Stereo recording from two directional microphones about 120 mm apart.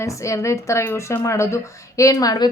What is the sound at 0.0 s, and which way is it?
A woman's voice, 25° left (ahead or behind).